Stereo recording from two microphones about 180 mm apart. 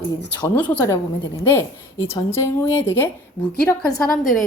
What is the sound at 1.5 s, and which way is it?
Speech, 15° left (ahead or behind).